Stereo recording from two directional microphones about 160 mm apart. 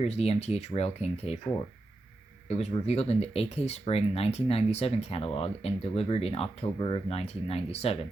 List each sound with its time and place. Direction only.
0.0 s speech: 40° left (ahead or behind)
2.5 s speech: 40° left (ahead or behind)